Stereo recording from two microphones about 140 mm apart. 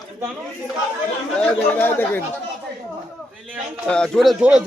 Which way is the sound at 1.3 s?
10° left (ahead or behind).